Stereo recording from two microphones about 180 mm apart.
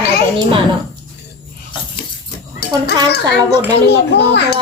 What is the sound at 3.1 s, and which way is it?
A child's voice, 70° left (ahead or behind).